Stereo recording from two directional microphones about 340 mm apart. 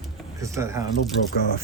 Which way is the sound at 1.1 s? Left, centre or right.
Left.